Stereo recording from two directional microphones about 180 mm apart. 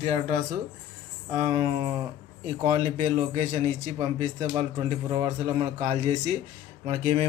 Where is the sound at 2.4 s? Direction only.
35° right (ahead or behind).